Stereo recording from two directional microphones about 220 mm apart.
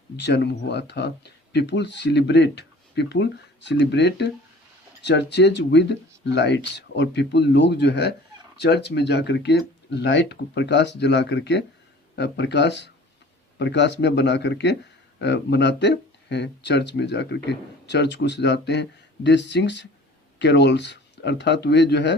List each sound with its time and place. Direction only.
0.2 s speech: 50° left (ahead or behind)